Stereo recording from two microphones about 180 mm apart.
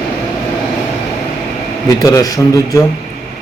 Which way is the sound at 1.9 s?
20° left (ahead or behind).